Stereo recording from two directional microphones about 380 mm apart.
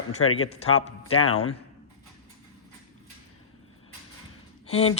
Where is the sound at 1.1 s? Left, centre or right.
Left.